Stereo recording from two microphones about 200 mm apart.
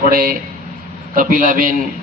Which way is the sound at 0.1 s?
45° right (ahead or behind).